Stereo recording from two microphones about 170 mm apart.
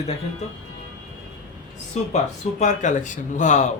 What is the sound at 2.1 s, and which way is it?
Speech, 45° left (ahead or behind).